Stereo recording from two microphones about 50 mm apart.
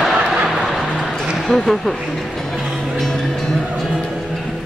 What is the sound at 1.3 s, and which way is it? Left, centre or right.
Speech, centre.